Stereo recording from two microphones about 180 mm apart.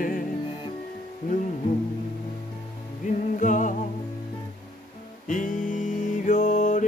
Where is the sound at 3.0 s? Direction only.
45° left (ahead or behind).